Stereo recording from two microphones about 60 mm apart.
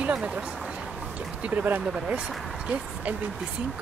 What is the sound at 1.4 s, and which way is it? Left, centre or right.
Speech, right.